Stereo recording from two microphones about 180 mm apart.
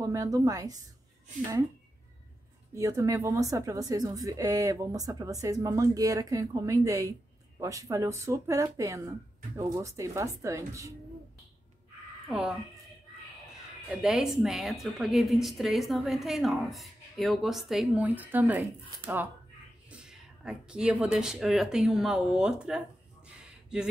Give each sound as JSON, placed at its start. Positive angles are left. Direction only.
{"t": 0.0, "sound": "speech", "side_deg": -15}
{"t": 2.7, "sound": "speech", "side_deg": -15}
{"t": 12.3, "sound": "a woman's voice", "side_deg": -5}
{"t": 13.8, "sound": "a woman's voice", "side_deg": -5}
{"t": 19.9, "sound": "speech", "side_deg": -5}